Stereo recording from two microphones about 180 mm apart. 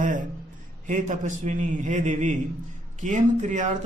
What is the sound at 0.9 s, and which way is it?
A man's voice, 45° right (ahead or behind).